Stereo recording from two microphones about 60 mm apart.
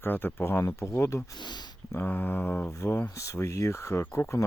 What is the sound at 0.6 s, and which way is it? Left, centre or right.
Speech, left.